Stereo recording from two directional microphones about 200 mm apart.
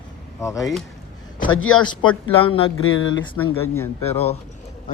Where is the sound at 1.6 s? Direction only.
90° left.